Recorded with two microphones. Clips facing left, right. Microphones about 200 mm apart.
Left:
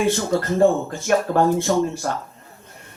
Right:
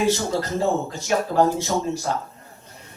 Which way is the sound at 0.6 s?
55° left (ahead or behind).